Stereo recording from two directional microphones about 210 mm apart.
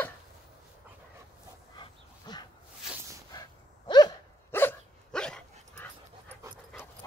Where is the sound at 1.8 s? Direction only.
20° left (ahead or behind).